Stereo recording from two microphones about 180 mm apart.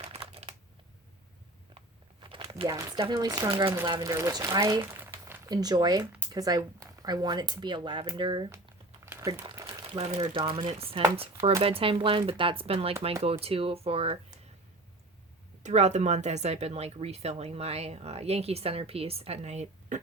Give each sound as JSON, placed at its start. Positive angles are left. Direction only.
{"t": 0.0, "sound": "a sound", "side_deg": -35}
{"t": 2.2, "sound": "crumpling", "side_deg": -25}
{"t": 3.0, "sound": "speech", "side_deg": -25}
{"t": 3.7, "sound": "speech", "side_deg": -15}
{"t": 9.0, "sound": "crumpling", "side_deg": -15}
{"t": 10.0, "sound": "speech", "side_deg": -30}
{"t": 15.6, "sound": "speech", "side_deg": -40}